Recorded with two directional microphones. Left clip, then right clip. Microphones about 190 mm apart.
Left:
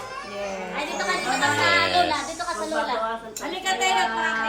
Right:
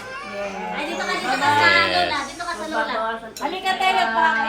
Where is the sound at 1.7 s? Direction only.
10° left (ahead or behind).